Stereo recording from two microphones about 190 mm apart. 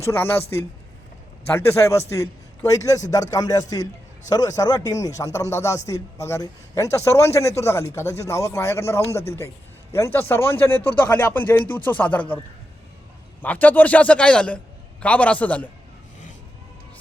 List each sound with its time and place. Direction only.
0.0 s speech: 10° left (ahead or behind)
1.5 s speech: 10° left (ahead or behind)
13.4 s speech: 10° left (ahead or behind)